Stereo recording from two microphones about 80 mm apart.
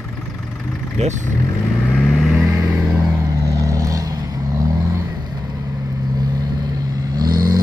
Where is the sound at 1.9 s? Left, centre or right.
Centre.